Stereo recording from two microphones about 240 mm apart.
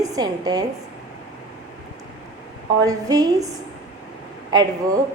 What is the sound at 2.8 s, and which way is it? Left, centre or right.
Speech, centre.